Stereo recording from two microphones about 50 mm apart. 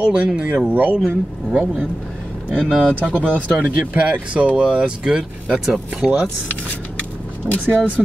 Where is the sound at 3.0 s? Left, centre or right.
Right; by 6.1 s centre.